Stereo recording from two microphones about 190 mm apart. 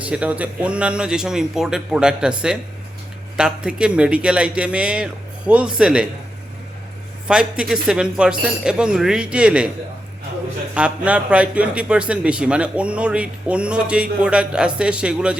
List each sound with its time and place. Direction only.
0.0 s a man's voice: 5° right (ahead or behind)
7.3 s a man's voice: 5° right (ahead or behind)
10.8 s a man's voice: 5° right (ahead or behind)